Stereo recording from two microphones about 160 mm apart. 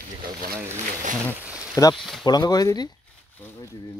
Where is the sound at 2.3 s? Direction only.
25° left (ahead or behind).